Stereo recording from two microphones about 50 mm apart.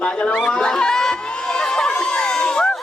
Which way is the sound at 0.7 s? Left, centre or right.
Centre.